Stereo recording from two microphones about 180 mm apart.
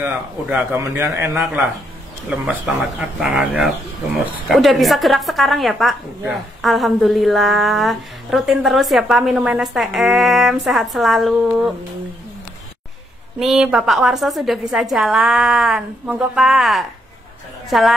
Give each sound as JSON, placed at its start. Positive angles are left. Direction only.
{"t": 0.0, "sound": "a man's voice", "side_deg": -10}
{"t": 13.4, "sound": "a woman's voice", "side_deg": 0}